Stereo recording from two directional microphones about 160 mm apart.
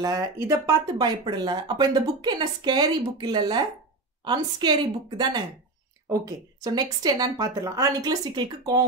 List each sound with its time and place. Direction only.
0.0 s speech: 20° right (ahead or behind)